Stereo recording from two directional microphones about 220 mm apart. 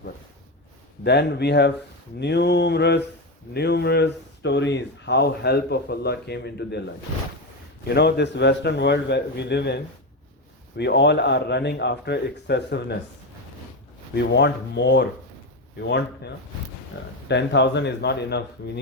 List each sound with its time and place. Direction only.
1.0 s speech: 50° left (ahead or behind)
7.9 s speech: 50° left (ahead or behind)
14.3 s speech: 50° left (ahead or behind)